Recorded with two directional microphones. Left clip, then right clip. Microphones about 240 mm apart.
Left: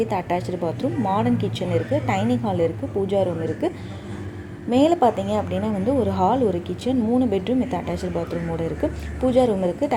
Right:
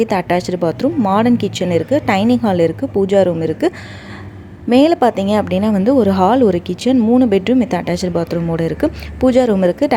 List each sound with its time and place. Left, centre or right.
0.3 s speech: right
4.7 s speech: right